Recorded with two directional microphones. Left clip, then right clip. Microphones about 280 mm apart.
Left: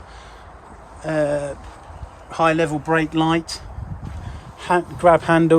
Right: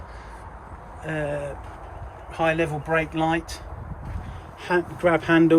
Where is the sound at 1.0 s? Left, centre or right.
Left.